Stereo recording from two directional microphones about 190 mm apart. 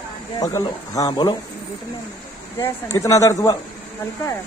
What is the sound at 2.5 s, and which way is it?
Speech, 15° left (ahead or behind).